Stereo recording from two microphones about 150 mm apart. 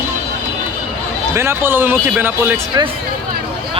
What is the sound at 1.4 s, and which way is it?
Speech, 15° right (ahead or behind).